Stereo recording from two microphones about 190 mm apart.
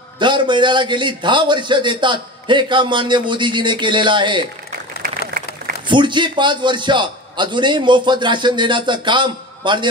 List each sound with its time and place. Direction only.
0.2 s a man's voice: 25° right (ahead or behind)
5.9 s a man's voice: 25° right (ahead or behind)